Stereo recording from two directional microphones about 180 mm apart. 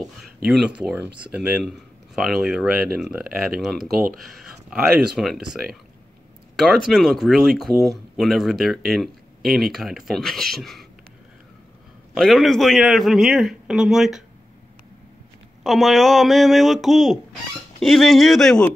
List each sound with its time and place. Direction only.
0.0 s speech: centre (ahead or behind)
3.9 s speech: 55° right (ahead or behind)
4.2 s speech: centre (ahead or behind)
12.1 s speech: centre (ahead or behind)
15.6 s speech: centre (ahead or behind)